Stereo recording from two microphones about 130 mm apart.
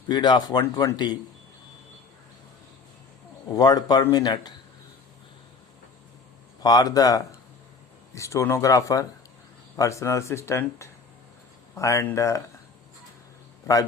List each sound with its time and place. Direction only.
0.1 s speech: 35° left (ahead or behind)
3.5 s speech: 30° left (ahead or behind)
6.6 s speech: 30° left (ahead or behind)